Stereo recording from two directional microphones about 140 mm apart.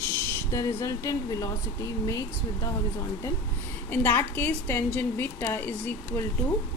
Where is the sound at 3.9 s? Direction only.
15° left (ahead or behind).